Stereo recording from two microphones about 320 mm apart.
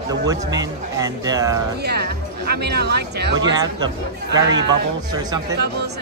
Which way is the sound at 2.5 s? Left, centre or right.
Right.